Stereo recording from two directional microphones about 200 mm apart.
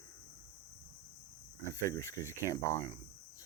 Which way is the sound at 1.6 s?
15° left (ahead or behind).